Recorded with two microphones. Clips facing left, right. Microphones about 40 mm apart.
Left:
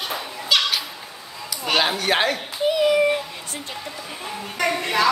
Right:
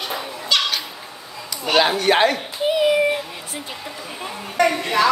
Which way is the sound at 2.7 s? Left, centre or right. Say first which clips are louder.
Right 1 dB; centre.